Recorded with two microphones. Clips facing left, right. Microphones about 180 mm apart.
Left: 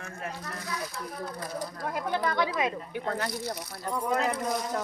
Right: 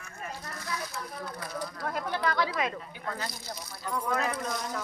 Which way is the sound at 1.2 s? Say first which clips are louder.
Left 3 dB; 40° left (ahead or behind).